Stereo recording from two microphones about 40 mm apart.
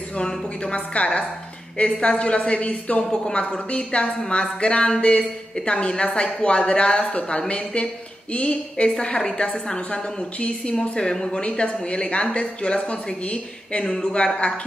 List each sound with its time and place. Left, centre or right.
0.2 s speech: centre
0.7 s a woman's voice: left
3.0 s a woman's voice: centre
3.3 s speech: left
8.8 s speech: left
11.4 s speech: left